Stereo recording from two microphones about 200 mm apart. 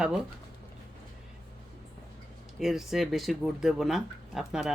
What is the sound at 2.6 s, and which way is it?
Speech, centre (ahead or behind).